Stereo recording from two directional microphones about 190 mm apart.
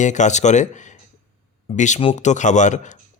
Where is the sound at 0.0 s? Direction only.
40° left (ahead or behind).